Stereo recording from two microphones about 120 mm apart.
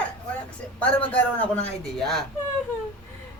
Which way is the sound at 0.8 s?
15° left (ahead or behind).